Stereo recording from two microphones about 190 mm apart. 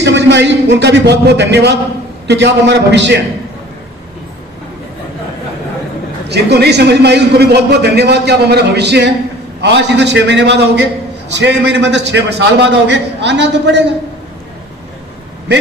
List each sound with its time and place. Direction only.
0.0 s a man's voice: 65° right (ahead or behind)
6.2 s a man's voice: 60° right (ahead or behind)